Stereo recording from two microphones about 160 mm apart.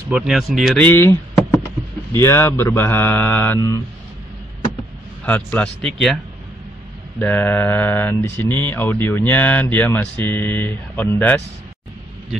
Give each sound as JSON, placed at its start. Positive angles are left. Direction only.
{"t": 0.1, "sound": "speech", "side_deg": 0}
{"t": 0.8, "sound": "a sound", "side_deg": 15}
{"t": 2.1, "sound": "speech", "side_deg": 15}
{"t": 5.2, "sound": "speech", "side_deg": 10}
{"t": 7.2, "sound": "speech", "side_deg": 10}